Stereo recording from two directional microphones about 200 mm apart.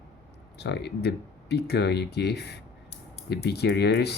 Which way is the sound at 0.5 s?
55° left (ahead or behind).